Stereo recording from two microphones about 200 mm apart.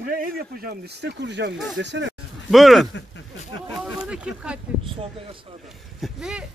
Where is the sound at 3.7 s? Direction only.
5° right (ahead or behind).